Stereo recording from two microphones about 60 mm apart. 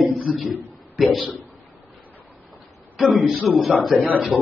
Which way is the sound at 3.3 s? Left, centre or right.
Centre.